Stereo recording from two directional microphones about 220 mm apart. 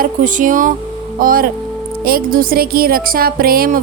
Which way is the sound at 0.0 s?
35° right (ahead or behind).